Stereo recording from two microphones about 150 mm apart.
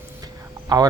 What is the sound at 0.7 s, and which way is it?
Speech, 25° right (ahead or behind).